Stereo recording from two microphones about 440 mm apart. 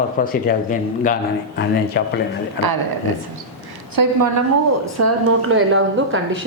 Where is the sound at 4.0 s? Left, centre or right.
Right.